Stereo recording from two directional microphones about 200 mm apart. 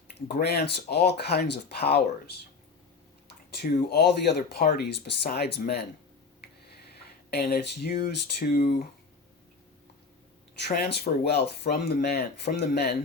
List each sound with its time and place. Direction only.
0.3 s speech: 55° left (ahead or behind)
3.6 s speech: 55° left (ahead or behind)
7.3 s speech: 50° left (ahead or behind)
10.6 s speech: 55° left (ahead or behind)